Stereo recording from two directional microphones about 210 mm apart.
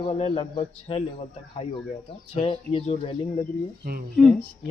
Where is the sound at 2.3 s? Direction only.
30° left (ahead or behind).